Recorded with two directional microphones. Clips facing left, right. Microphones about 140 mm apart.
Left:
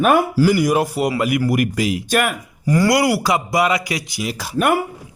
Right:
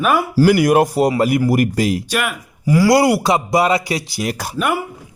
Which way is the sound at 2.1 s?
50° left (ahead or behind).